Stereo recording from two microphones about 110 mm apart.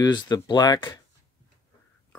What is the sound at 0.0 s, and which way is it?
Speech, 40° left (ahead or behind).